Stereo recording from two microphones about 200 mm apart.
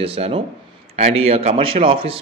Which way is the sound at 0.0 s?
30° right (ahead or behind).